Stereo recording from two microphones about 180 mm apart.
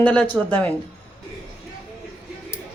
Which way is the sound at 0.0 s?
10° left (ahead or behind).